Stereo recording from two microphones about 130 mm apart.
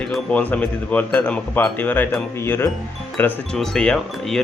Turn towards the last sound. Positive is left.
turn(degrees=5)  # may be behind; listen again after turning